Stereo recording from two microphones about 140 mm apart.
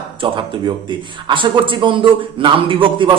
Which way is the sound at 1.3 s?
35° right (ahead or behind).